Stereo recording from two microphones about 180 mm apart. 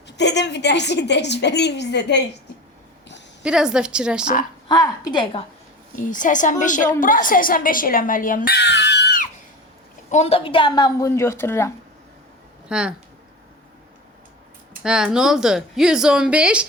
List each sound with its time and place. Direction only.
0.2 s a woman's voice: 70° left (ahead or behind)
3.4 s a woman's voice: 5° right (ahead or behind)
4.7 s a woman's voice: 25° left (ahead or behind)
6.0 s a woman's voice: 45° left (ahead or behind)
8.5 s screaming: 70° left (ahead or behind)
10.1 s a woman's voice: 35° left (ahead or behind); by 11.7 s 15° left (ahead or behind)
12.6 s speech: 5° right (ahead or behind)
14.8 s a woman's voice: 5° right (ahead or behind)